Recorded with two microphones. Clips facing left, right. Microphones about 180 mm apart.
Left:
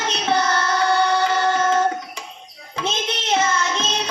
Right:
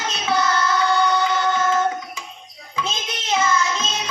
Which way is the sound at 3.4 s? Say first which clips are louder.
Right 2 dB; 40° left (ahead or behind).